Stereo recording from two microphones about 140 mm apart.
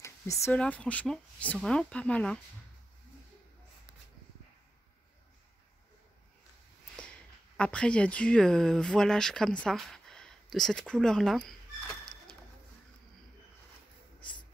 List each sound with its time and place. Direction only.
0.0 s a sound: 20° left (ahead or behind)
0.5 s speech: 10° left (ahead or behind)
7.5 s speech: 5° left (ahead or behind)